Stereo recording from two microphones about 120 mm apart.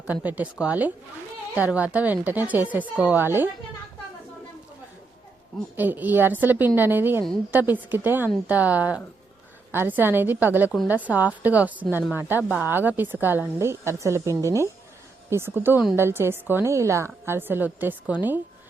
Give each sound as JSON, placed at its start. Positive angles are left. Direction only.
{"t": 0.1, "sound": "a woman's voice", "side_deg": -15}
{"t": 5.7, "sound": "a woman's voice", "side_deg": -15}